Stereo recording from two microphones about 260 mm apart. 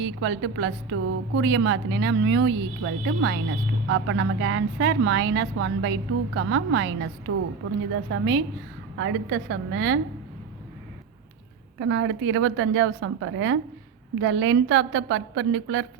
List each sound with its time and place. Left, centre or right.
0.0 s a woman's voice: right
11.8 s a woman's voice: right